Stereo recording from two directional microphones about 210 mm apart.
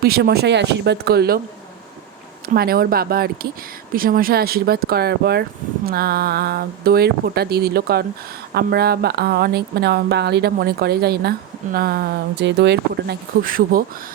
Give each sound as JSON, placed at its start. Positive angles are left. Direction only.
{"t": 0.0, "sound": "speech", "side_deg": -50}
{"t": 2.5, "sound": "speech", "side_deg": -45}